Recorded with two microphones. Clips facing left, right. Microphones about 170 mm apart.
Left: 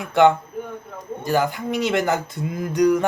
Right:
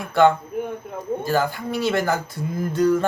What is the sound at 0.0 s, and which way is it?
Speech, 20° left (ahead or behind).